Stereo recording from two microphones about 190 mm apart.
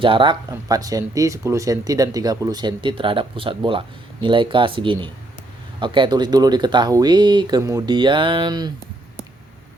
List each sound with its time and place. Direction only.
0.0 s speech: 25° right (ahead or behind)